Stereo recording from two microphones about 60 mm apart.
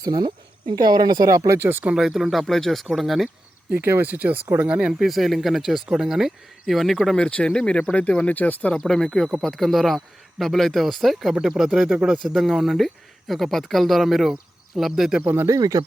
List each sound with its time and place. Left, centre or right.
0.0 s speech: right
1.2 s speech: right
2.0 s speech: centre
3.7 s speech: right
4.1 s speech: right
4.9 s speech: centre
7.2 s speech: centre
8.9 s speech: centre
15.2 s speech: right
15.4 s speech: right